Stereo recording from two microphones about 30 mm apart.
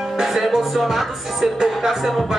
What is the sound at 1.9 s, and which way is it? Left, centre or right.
Speech, centre.